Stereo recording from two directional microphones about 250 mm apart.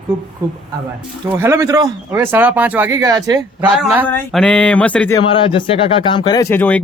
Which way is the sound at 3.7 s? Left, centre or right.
Centre.